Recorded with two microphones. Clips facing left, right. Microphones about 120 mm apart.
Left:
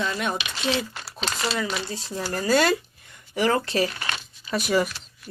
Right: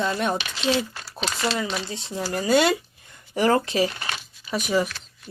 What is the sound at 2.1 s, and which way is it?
Speech, 15° right (ahead or behind).